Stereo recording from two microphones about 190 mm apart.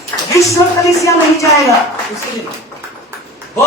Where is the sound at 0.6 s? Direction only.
15° left (ahead or behind).